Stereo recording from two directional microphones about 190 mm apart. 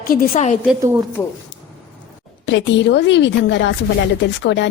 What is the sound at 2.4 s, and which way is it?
Speech, 70° left (ahead or behind).